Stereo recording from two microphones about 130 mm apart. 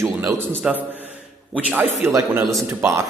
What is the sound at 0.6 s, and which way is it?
A man's voice, 5° right (ahead or behind).